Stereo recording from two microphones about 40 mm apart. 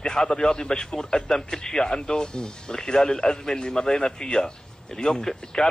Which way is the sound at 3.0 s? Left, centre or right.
Centre.